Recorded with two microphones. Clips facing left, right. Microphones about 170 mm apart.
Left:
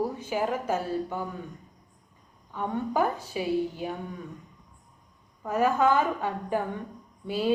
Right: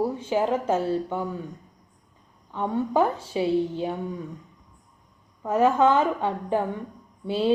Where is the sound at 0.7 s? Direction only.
10° left (ahead or behind).